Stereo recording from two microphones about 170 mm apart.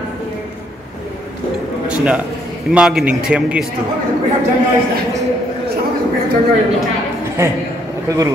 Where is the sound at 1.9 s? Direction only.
5° right (ahead or behind).